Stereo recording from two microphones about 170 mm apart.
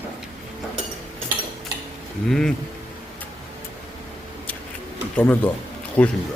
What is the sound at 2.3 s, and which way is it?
Speech, 5° left (ahead or behind).